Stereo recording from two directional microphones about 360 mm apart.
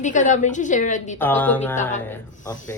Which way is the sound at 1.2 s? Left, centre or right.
Centre.